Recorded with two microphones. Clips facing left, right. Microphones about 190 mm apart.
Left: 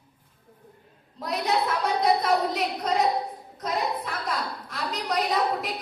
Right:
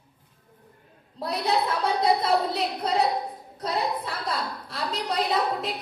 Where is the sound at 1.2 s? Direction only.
30° right (ahead or behind).